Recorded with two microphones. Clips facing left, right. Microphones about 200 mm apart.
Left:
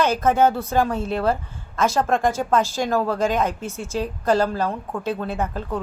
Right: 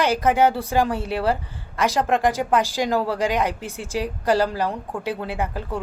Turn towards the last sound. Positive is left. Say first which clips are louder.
# left 1 dB
turn(degrees=-10)  # may be behind; listen again after turning